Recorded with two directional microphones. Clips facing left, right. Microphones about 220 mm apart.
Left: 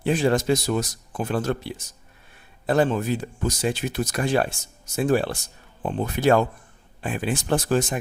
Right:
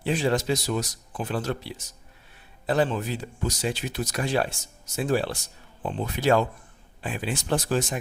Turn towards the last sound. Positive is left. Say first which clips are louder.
# left 3 dB
turn(degrees=50)  # may be behind; listen again after turning